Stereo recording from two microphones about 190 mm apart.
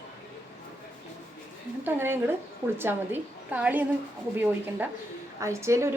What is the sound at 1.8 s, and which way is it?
A woman's voice, 10° right (ahead or behind).